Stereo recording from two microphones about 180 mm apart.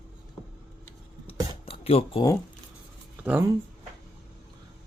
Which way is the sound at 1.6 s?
30° left (ahead or behind).